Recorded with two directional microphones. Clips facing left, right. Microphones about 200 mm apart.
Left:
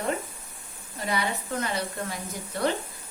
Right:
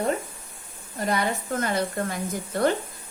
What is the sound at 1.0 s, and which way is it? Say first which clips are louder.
Speech: right 4 dB; 50° right (ahead or behind).